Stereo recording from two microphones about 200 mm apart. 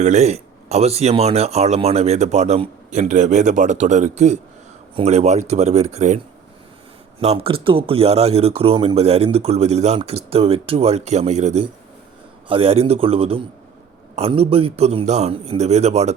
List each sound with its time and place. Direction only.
0.0 s speech: 35° right (ahead or behind)
7.2 s speech: 30° right (ahead or behind)